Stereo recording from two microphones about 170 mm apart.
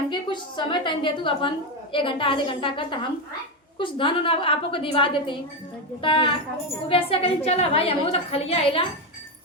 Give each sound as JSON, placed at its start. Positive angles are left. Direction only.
{"t": 0.1, "sound": "a woman's voice", "side_deg": 25}